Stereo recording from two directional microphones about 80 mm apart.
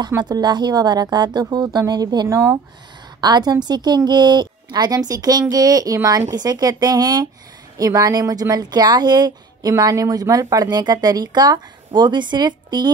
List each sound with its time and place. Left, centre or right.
0.2 s a woman's voice: right